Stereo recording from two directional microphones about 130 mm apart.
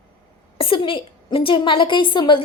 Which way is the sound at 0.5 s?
40° left (ahead or behind).